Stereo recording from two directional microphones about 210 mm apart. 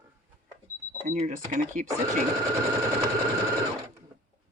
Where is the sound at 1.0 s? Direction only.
30° right (ahead or behind).